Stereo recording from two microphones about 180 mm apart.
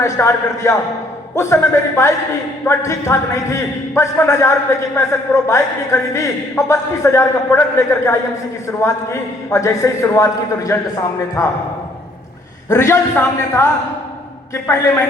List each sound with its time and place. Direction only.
0.0 s a man's voice: 15° left (ahead or behind)
12.6 s a man's voice: 15° left (ahead or behind)